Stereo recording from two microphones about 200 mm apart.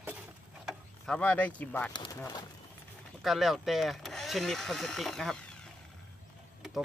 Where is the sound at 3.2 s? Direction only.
Centre (ahead or behind).